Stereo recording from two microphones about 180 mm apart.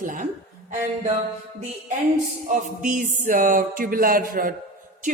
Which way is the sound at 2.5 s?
45° right (ahead or behind).